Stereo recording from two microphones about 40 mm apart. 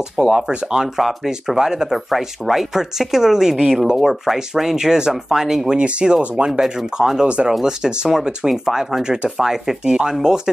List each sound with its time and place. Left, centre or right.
0.2 s speech: centre
0.9 s speech: centre
1.6 s speech: centre
2.0 s speech: centre
5.8 s speech: right
6.6 s speech: centre
7.2 s speech: right
7.6 s speech: centre
9.0 s speech: centre